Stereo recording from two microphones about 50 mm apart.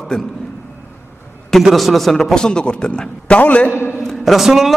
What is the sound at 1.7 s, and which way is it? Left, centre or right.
Speech, centre.